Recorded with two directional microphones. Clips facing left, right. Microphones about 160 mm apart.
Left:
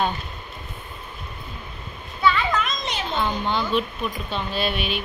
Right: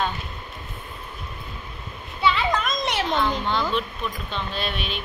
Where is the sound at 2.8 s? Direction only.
70° right (ahead or behind).